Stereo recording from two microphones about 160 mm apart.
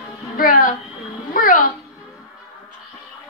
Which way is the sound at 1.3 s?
60° left (ahead or behind).